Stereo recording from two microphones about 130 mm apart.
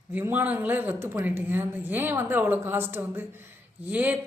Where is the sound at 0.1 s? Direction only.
15° right (ahead or behind).